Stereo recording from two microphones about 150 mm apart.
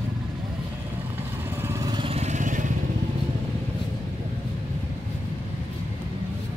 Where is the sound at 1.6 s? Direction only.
20° right (ahead or behind); by 2.7 s 55° right (ahead or behind).